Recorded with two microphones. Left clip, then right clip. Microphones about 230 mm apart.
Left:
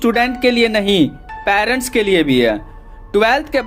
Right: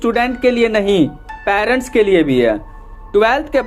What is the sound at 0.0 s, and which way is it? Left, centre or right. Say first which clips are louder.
Speech: even; left.